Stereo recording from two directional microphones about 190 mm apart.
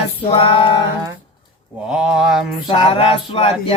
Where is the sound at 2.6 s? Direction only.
30° left (ahead or behind).